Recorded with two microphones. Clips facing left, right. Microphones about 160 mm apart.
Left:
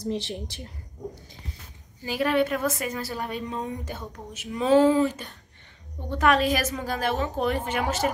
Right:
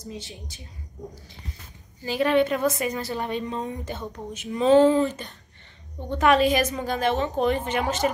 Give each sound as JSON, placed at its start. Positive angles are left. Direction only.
{"t": 0.1, "sound": "a woman's voice", "side_deg": 75}
{"t": 2.0, "sound": "a woman's voice", "side_deg": 5}